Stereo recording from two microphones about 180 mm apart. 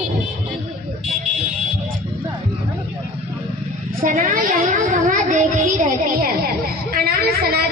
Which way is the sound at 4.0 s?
45° right (ahead or behind).